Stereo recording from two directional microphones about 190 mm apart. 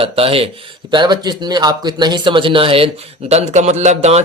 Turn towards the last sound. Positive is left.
turn(degrees=-35)  # may be behind; listen again after turning